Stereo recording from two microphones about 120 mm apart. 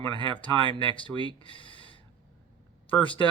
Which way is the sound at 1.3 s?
45° left (ahead or behind).